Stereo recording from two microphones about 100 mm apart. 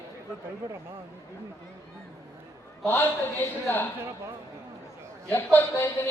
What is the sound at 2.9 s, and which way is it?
Speech, 20° left (ahead or behind).